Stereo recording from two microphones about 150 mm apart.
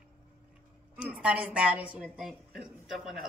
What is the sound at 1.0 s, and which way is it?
A woman's voice, 5° right (ahead or behind).